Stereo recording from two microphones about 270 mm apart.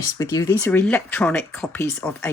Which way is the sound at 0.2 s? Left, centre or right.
Centre.